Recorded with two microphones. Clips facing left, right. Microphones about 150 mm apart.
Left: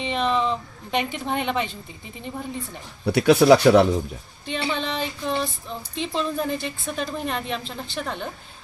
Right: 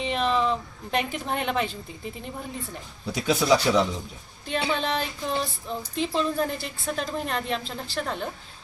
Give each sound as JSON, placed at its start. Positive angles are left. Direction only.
{"t": 0.0, "sound": "a sound", "side_deg": 0}
{"t": 3.1, "sound": "speech", "side_deg": 70}
{"t": 4.6, "sound": "speech", "side_deg": 0}